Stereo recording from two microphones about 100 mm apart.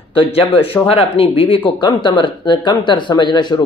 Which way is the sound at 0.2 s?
70° left (ahead or behind).